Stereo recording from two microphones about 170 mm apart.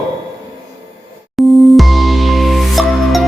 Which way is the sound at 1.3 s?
Centre (ahead or behind).